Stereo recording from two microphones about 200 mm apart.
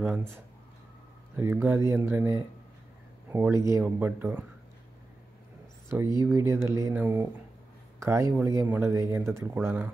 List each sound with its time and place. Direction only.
1.3 s speech: 10° right (ahead or behind)
5.9 s speech: 10° right (ahead or behind)